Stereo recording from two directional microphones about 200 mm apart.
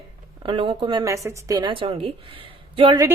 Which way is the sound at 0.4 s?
25° right (ahead or behind).